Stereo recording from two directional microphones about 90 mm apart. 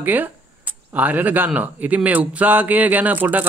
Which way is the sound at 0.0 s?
20° right (ahead or behind).